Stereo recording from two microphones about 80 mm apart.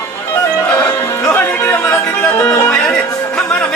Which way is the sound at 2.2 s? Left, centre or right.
Centre.